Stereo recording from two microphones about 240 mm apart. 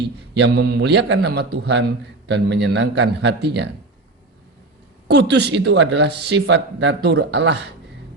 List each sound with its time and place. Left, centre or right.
0.3 s a man's voice: right
5.0 s a man's voice: right